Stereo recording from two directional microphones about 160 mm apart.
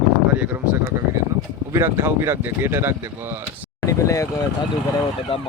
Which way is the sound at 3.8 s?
20° left (ahead or behind).